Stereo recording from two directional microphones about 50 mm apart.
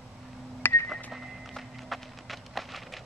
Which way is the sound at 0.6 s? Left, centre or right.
Left.